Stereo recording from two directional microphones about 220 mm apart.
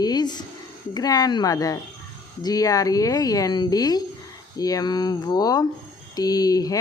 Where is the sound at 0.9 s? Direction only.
15° left (ahead or behind).